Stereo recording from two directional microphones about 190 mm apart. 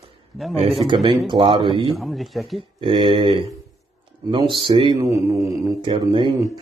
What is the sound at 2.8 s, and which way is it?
Speech, 25° right (ahead or behind).